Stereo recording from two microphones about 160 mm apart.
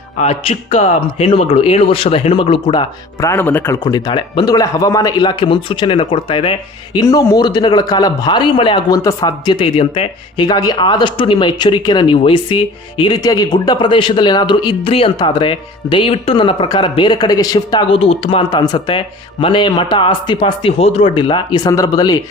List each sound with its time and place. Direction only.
0.2 s speech: 40° left (ahead or behind)
3.2 s speech: 15° left (ahead or behind)
3.8 s a man's voice: 25° left (ahead or behind)